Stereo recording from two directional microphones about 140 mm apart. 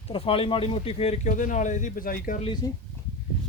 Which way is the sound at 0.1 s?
40° left (ahead or behind).